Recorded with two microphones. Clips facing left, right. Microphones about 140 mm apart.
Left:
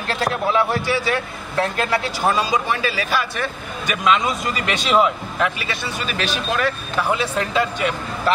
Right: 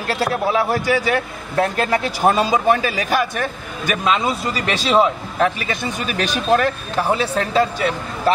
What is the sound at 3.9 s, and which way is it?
Speech, 35° right (ahead or behind).